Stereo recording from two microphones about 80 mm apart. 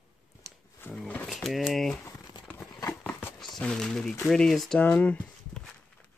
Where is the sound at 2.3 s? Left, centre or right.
Left.